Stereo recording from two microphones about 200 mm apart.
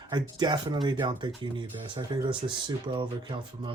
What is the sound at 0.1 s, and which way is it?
Speech, 20° right (ahead or behind).